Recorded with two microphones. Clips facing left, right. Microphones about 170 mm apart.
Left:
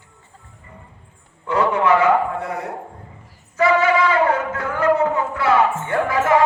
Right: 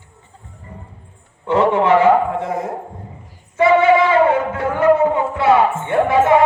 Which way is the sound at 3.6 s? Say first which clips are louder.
Right 4 dB; 25° right (ahead or behind).